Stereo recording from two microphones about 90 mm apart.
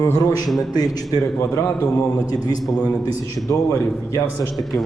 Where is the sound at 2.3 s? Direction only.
45° left (ahead or behind).